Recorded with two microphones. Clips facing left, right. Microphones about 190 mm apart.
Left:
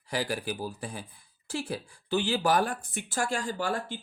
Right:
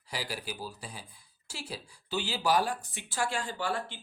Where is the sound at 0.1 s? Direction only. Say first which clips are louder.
Left 7 dB; 55° left (ahead or behind).